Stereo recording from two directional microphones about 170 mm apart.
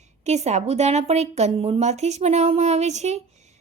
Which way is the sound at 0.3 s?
40° right (ahead or behind).